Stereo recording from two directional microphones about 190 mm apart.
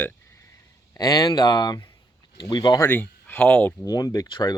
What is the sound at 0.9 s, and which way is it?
Speech, 20° left (ahead or behind).